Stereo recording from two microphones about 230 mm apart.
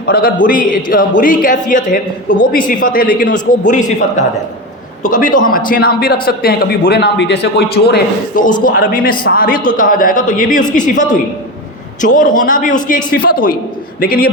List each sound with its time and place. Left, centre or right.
0.0 s a man's voice: left